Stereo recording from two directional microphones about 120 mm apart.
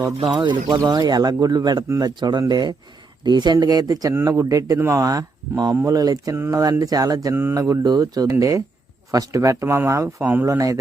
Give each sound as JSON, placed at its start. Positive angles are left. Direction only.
{"t": 0.2, "sound": "speech", "side_deg": -40}
{"t": 6.3, "sound": "speech", "side_deg": -20}
{"t": 6.6, "sound": "speech", "side_deg": -30}